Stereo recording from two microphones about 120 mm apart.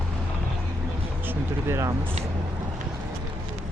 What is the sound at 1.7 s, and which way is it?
Speech, 25° right (ahead or behind).